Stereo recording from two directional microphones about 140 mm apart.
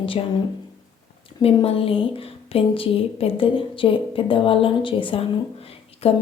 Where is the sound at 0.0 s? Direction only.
40° left (ahead or behind).